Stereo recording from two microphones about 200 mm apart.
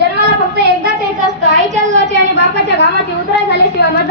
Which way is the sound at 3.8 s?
55° left (ahead or behind).